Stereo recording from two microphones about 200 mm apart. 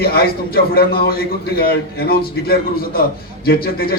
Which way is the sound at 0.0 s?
50° left (ahead or behind).